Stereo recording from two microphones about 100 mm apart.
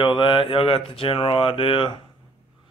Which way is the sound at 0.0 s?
55° left (ahead or behind).